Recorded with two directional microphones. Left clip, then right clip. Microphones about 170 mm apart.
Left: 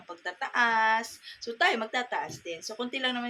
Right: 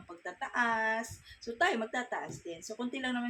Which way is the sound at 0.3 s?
20° right (ahead or behind).